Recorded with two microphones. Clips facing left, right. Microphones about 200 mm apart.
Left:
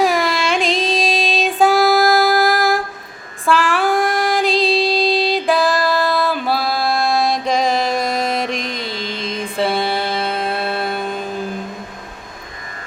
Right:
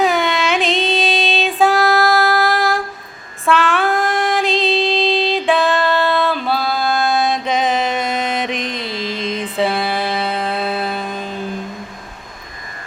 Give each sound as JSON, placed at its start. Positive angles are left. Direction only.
{"t": 0.0, "sound": "carnatic music", "side_deg": 0}
{"t": 0.9, "sound": "child singing", "side_deg": 0}
{"t": 4.4, "sound": "music", "side_deg": 35}
{"t": 5.3, "sound": "music", "side_deg": 0}